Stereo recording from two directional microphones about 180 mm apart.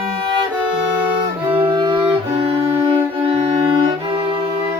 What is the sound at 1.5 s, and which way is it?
Music, 30° right (ahead or behind).